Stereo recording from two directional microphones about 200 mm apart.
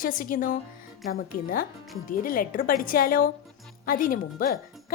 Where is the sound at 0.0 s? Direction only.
45° left (ahead or behind).